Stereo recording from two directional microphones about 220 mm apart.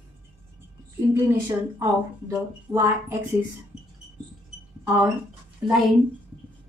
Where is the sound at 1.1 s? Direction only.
10° right (ahead or behind).